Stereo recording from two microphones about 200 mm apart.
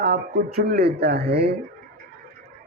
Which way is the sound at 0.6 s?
50° right (ahead or behind).